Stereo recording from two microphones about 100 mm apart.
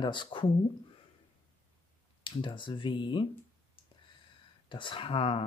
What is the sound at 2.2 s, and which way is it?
Speech, 55° left (ahead or behind).